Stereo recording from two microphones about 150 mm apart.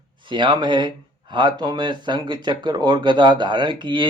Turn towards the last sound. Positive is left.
turn(degrees=-30)  # may be behind; listen again after turning